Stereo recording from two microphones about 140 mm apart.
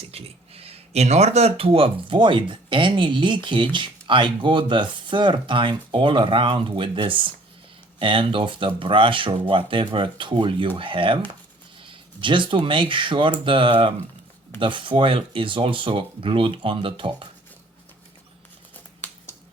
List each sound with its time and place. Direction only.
0.0 s speech: 45° right (ahead or behind)
12.2 s speech: 35° right (ahead or behind)
19.0 s a sound: 20° left (ahead or behind)